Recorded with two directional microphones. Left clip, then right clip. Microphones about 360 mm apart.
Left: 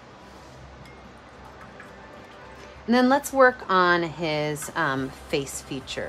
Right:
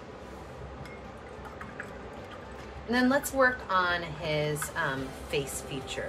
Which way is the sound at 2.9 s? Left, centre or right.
Centre.